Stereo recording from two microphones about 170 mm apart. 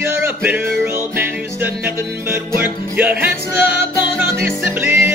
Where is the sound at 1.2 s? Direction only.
10° right (ahead or behind).